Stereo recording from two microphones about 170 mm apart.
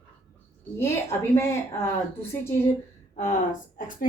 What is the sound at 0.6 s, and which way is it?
Speech, 15° left (ahead or behind).